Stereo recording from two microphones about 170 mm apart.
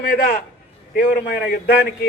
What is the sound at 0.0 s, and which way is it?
A man's voice, 65° left (ahead or behind).